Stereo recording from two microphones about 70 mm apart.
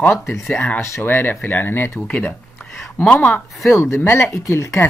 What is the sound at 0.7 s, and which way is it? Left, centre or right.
Speech, left.